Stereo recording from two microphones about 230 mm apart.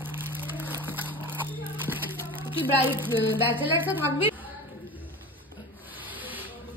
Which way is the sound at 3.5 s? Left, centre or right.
Centre.